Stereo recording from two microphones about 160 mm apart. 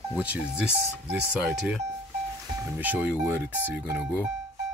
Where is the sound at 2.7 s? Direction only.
10° right (ahead or behind).